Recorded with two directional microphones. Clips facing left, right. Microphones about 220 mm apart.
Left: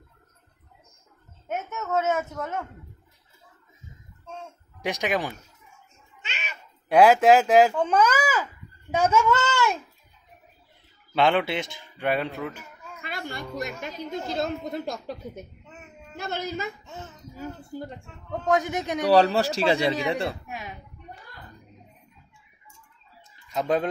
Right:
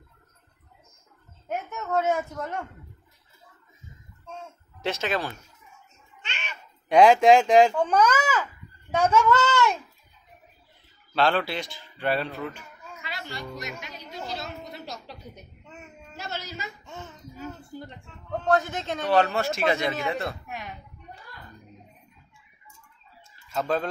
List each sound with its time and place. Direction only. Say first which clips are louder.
1.5 s speech: even; centre (ahead or behind)
4.8 s speech: left 1 dB; 15° left (ahead or behind)
6.2 s cat: left 1 dB; 5° left (ahead or behind)
7.9 s speech: even; 5° left (ahead or behind)
11.1 s a man's voice: left 2 dB; 20° left (ahead or behind)
13.0 s a woman's voice: left 3 dB; 55° left (ahead or behind)
18.5 s speech: left 1 dB; 15° left (ahead or behind)
19.0 s a man's voice: left 4 dB; 35° left (ahead or behind)
23.5 s a man's voice: left 2 dB; 20° left (ahead or behind)